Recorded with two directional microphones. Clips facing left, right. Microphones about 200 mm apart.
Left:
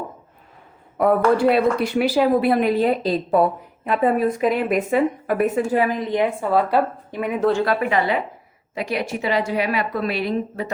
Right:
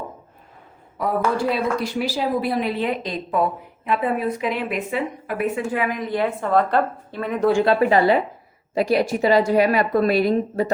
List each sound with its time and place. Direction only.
0.9 s speech: 60° left (ahead or behind); by 6.0 s 35° left (ahead or behind)
6.1 s a woman's voice: 15° left (ahead or behind)
7.6 s a woman's voice: 30° right (ahead or behind)